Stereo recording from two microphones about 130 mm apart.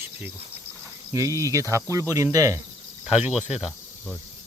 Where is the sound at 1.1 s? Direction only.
25° right (ahead or behind).